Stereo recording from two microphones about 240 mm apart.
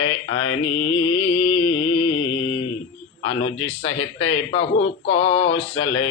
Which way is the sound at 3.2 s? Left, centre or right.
Left.